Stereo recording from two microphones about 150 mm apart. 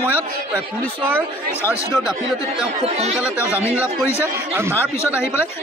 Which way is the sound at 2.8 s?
45° right (ahead or behind).